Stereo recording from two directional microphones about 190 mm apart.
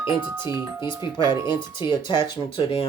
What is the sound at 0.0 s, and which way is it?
Speech, 15° right (ahead or behind).